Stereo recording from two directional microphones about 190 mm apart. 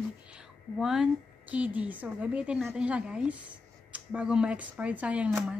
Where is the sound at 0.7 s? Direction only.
Centre (ahead or behind).